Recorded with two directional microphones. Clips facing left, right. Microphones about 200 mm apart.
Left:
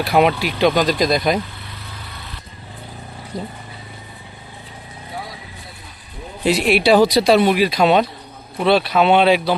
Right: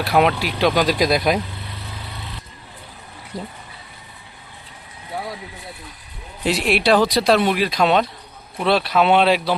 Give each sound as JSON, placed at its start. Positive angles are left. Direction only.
{"t": 0.0, "sound": "speech", "side_deg": 0}
{"t": 3.3, "sound": "speech", "side_deg": -5}
{"t": 6.4, "sound": "speech", "side_deg": 0}